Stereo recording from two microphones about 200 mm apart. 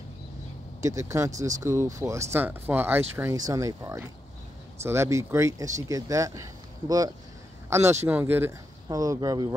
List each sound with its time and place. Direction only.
0.8 s speech: 15° right (ahead or behind)
7.7 s speech: 15° right (ahead or behind)